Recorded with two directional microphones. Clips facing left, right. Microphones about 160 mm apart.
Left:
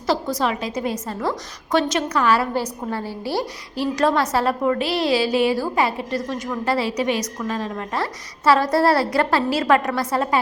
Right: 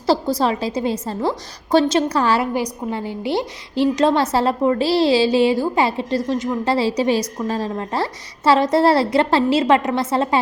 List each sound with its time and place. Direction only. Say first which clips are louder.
0.0 s a woman's voice: right 4 dB; 30° right (ahead or behind)
2.5 s a woman's voice: right 2 dB; 15° right (ahead or behind)